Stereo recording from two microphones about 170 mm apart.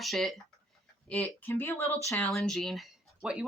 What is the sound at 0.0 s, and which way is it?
A woman's voice, centre (ahead or behind).